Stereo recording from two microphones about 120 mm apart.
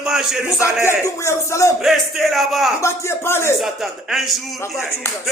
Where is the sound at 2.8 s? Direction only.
20° left (ahead or behind).